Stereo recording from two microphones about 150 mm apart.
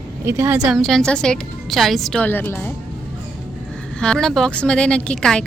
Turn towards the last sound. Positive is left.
turn(degrees=5)  # may be behind; listen again after turning